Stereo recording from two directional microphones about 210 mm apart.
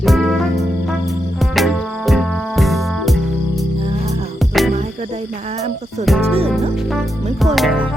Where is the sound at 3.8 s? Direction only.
30° right (ahead or behind).